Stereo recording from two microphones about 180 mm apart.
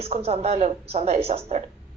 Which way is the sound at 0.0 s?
35° right (ahead or behind).